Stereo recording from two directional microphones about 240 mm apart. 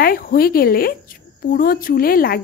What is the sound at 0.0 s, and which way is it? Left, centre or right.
A woman's voice, left.